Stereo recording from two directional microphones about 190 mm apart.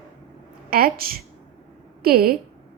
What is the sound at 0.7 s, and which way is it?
A woman's voice, 50° right (ahead or behind).